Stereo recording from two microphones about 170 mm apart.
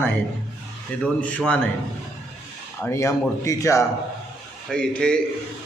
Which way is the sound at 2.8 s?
15° left (ahead or behind).